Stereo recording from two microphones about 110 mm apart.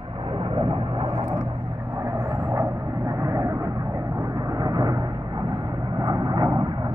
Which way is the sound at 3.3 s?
30° right (ahead or behind).